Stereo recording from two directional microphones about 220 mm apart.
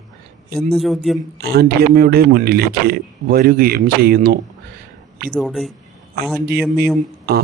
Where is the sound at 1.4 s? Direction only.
45° right (ahead or behind).